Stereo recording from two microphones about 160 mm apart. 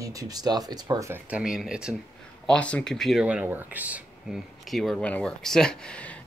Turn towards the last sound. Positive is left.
turn(degrees=5)  # may be behind; listen again after turning